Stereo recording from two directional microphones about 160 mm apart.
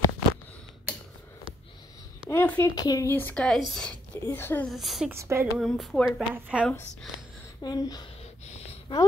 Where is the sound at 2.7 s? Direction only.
25° left (ahead or behind).